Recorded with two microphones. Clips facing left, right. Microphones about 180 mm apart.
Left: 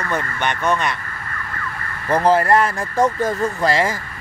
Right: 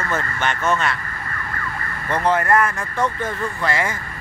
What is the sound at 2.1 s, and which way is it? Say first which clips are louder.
Speech: left 3 dB; 35° left (ahead or behind).